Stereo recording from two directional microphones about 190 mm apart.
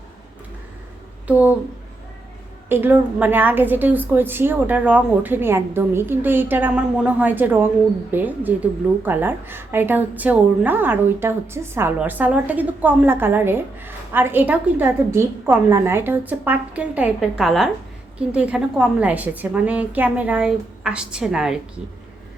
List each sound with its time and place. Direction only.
1.3 s a woman's voice: 10° right (ahead or behind)
2.6 s a woman's voice: 10° right (ahead or behind)